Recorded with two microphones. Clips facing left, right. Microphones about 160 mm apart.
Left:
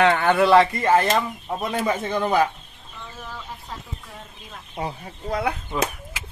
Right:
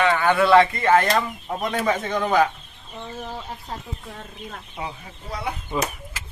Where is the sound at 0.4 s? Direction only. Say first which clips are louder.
Right 1 dB; 10° left (ahead or behind).